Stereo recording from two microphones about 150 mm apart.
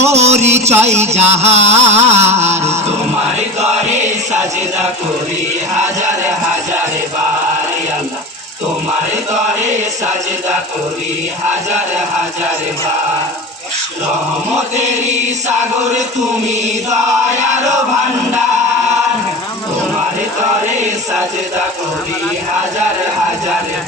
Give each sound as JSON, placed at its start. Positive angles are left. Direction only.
{"t": 0.0, "sound": "music", "side_deg": -45}
{"t": 0.9, "sound": "chant", "side_deg": -45}
{"t": 5.7, "sound": "chant", "side_deg": -50}
{"t": 9.6, "sound": "chant", "side_deg": -50}
{"t": 14.5, "sound": "chant", "side_deg": -50}
{"t": 20.7, "sound": "chant", "side_deg": -50}